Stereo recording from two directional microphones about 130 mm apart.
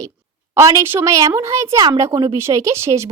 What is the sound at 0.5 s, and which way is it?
A woman's voice, 20° right (ahead or behind).